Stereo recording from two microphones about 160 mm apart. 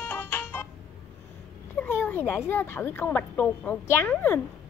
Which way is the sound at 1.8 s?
10° left (ahead or behind).